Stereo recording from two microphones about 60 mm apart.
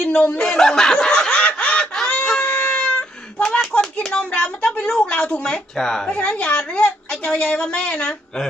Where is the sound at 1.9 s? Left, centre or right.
Centre.